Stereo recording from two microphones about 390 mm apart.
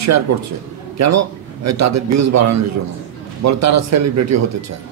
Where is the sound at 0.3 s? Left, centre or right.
Right.